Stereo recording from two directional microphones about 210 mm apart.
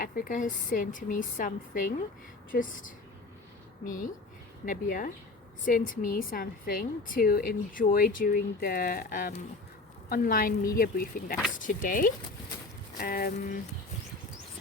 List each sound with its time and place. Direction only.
0.0 s a woman's voice: 40° left (ahead or behind)